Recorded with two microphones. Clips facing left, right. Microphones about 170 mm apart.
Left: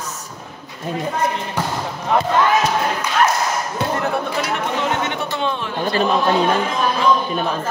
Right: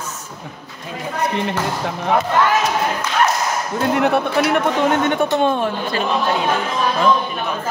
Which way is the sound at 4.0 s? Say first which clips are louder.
Right 5 dB; 65° right (ahead or behind).